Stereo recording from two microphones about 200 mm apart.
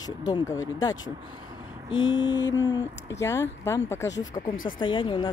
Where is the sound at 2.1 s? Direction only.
65° left (ahead or behind).